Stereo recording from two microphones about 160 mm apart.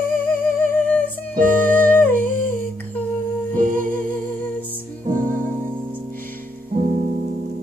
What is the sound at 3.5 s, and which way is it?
Music, 55° right (ahead or behind).